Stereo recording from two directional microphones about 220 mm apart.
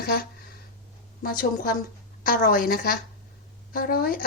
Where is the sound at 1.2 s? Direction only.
40° left (ahead or behind).